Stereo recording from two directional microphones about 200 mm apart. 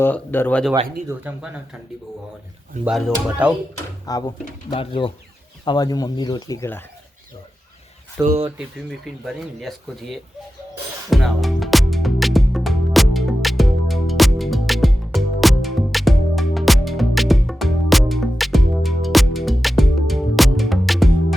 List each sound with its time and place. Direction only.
0.0 s speech: 10° left (ahead or behind)
1.0 s speech: 5° right (ahead or behind)
2.8 s speech: 5° right (ahead or behind)
4.1 s speech: 20° left (ahead or behind)
8.2 s speech: 15° right (ahead or behind)
9.2 s speech: centre (ahead or behind)
11.1 s music: centre (ahead or behind)